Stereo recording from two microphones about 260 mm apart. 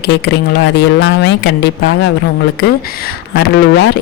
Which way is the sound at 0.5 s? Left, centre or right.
Left.